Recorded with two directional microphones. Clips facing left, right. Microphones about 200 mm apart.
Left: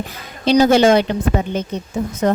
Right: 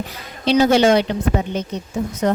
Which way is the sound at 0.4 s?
45° left (ahead or behind).